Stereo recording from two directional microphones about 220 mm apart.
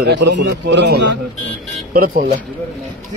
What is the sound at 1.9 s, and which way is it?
Speech, 40° right (ahead or behind).